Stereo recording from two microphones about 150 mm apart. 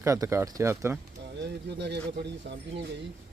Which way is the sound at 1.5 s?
90° right.